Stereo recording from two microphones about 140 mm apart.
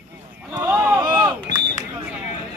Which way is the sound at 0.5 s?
15° right (ahead or behind).